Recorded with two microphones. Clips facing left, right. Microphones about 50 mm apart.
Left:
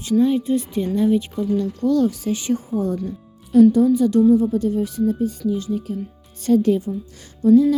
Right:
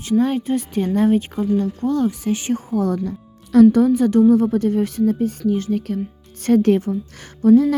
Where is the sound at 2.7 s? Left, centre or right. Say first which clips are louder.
Right 2 dB; right.